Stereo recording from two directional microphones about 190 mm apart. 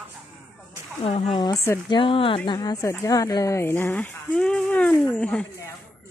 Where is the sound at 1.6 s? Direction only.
15° left (ahead or behind).